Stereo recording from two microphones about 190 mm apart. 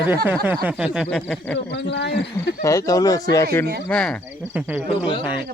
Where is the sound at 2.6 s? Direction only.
15° left (ahead or behind).